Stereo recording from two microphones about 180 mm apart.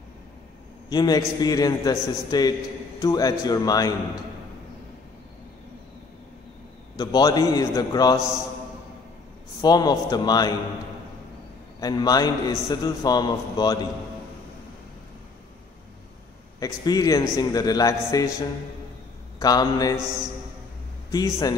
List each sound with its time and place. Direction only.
0.8 s a man's voice: 20° left (ahead or behind)
7.0 s a man's voice: 20° left (ahead or behind)
9.6 s a man's voice: 20° left (ahead or behind)
11.8 s a man's voice: 20° left (ahead or behind)
16.5 s a man's voice: 20° left (ahead or behind)
19.4 s a man's voice: 20° left (ahead or behind)
21.1 s a man's voice: 20° left (ahead or behind)